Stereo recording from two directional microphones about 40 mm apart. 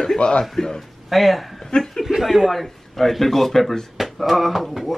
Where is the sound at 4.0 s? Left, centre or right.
Centre.